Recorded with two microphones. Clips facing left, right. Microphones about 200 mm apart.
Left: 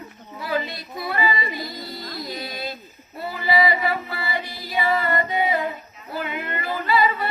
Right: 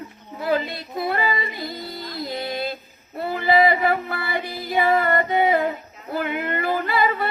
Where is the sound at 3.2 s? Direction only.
55° right (ahead or behind).